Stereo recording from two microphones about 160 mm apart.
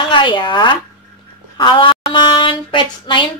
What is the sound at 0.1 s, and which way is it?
Speech, 30° left (ahead or behind).